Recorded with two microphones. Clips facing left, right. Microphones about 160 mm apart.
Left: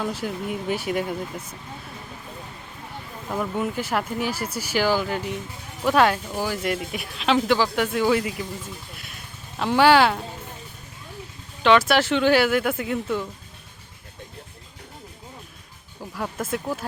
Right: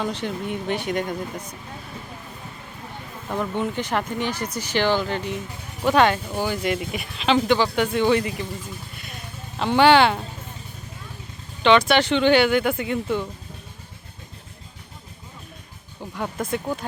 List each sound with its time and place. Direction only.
0.0 s speech: 5° left (ahead or behind)
3.2 s speech: 5° left (ahead or behind)
9.6 s speech: centre (ahead or behind)
11.6 s speech: centre (ahead or behind)
16.1 s speech: centre (ahead or behind)